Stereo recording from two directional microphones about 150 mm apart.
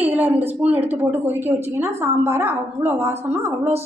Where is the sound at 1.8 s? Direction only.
15° right (ahead or behind).